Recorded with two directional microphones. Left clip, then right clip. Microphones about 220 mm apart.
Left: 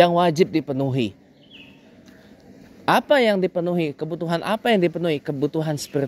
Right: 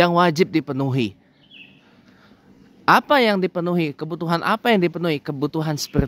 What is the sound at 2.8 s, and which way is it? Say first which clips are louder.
Speech: right 2 dB; 20° right (ahead or behind).